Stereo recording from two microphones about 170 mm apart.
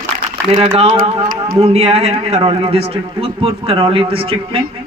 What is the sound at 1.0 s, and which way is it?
A man's voice, 35° right (ahead or behind).